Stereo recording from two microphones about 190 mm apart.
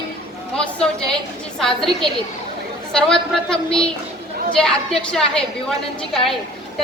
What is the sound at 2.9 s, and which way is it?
A woman's voice, 5° left (ahead or behind).